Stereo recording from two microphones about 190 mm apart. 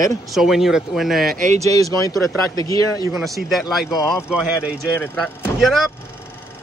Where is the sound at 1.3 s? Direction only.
40° right (ahead or behind).